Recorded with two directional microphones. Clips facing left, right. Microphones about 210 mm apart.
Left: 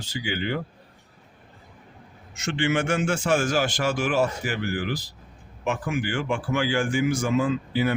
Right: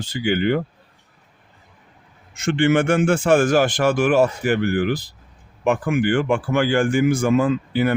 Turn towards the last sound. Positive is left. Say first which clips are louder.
# right 4 dB
turn(degrees=-55)  # may be behind; listen again after turning